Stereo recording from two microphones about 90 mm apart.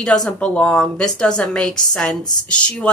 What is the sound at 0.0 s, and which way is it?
A woman's voice, 10° left (ahead or behind).